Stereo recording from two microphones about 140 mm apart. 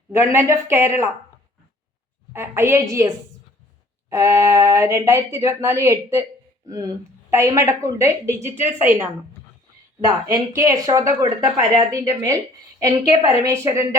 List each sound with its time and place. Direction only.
0.2 s speech: 20° right (ahead or behind)
2.3 s a woman's voice: 15° right (ahead or behind)
4.1 s speech: 20° right (ahead or behind)
10.2 s speech: 20° right (ahead or behind)